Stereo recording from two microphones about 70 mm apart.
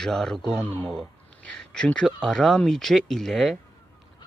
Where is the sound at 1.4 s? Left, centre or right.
Centre.